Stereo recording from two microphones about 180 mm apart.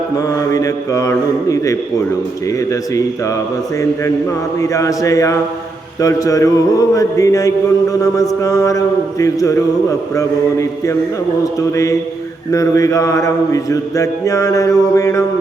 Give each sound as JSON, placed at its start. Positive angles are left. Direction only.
{"t": 0.2, "sound": "mantra", "side_deg": 20}
{"t": 4.6, "sound": "mantra", "side_deg": 20}
{"t": 12.5, "sound": "mantra", "side_deg": 15}